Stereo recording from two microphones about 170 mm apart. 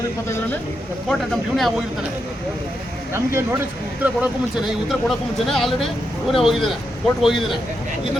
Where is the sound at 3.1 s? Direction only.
15° right (ahead or behind).